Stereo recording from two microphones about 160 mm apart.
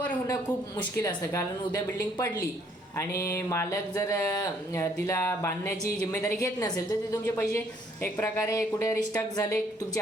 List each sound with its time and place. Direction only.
1.0 s a woman's voice: 20° left (ahead or behind)